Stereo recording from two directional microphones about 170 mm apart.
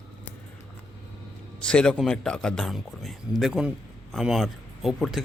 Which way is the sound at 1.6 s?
5° left (ahead or behind).